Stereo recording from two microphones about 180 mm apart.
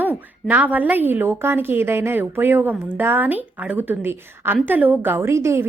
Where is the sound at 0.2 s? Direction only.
10° right (ahead or behind).